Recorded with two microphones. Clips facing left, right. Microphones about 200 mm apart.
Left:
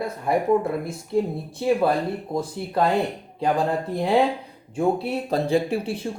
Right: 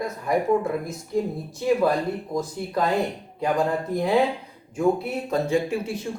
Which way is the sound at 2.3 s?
30° left (ahead or behind).